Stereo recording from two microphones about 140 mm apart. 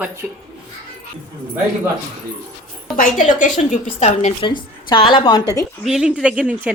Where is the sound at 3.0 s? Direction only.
70° left (ahead or behind).